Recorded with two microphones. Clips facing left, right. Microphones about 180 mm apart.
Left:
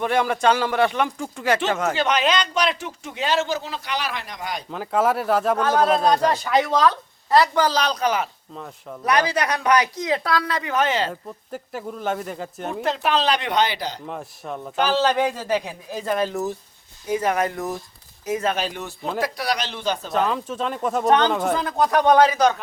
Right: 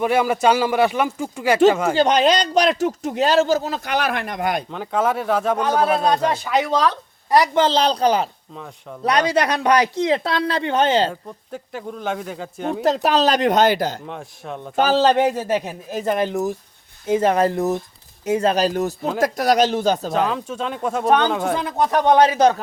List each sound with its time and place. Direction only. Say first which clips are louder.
0.0 s speech: right 3 dB; 5° right (ahead or behind)
2.0 s speech: right 5 dB; 35° right (ahead or behind); by 4.6 s 55° right (ahead or behind)
4.7 s speech: even; centre (ahead or behind)
5.5 s speech: even; 10° right (ahead or behind); by 8.3 s 30° right (ahead or behind)
8.5 s speech: left 1 dB; centre (ahead or behind)
9.0 s speech: right 3 dB; 30° right (ahead or behind)
11.1 s speech: even; centre (ahead or behind)
12.8 s speech: right 4 dB; 40° right (ahead or behind)
14.1 s speech: even; centre (ahead or behind)
14.8 s speech: right 4 dB; 40° right (ahead or behind)
15.3 s speech: right 3 dB; 20° right (ahead or behind)
17.1 s speech: right 5 dB; 25° right (ahead or behind)
20.1 s speech: right 1 dB; centre (ahead or behind)
21.7 s speech: right 1 dB; 15° right (ahead or behind)